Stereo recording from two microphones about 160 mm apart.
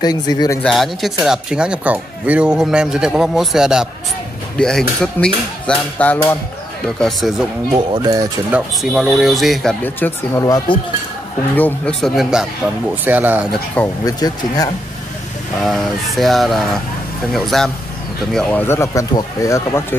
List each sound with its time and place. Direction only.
0.0 s speech: 25° left (ahead or behind)
0.6 s speech: centre (ahead or behind)
7.7 s speech: 25° right (ahead or behind)
8.5 s speech: 10° right (ahead or behind); by 10.8 s 20° left (ahead or behind)
11.5 s speech: 10° left (ahead or behind); by 13.5 s 10° right (ahead or behind)
14.0 s speech: 25° left (ahead or behind)
15.6 s speech: centre (ahead or behind); by 19.8 s 20° left (ahead or behind)